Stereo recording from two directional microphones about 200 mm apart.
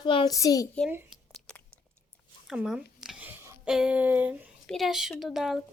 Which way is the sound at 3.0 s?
10° right (ahead or behind).